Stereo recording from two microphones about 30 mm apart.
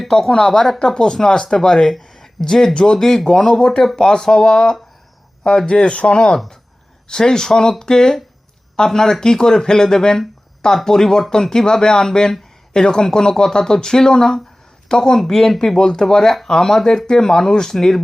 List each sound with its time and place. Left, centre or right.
0.1 s speech: centre; by 6.2 s left
7.1 s speech: left
15.2 s speech: centre